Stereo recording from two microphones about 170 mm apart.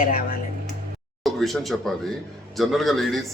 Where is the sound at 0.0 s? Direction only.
55° left (ahead or behind).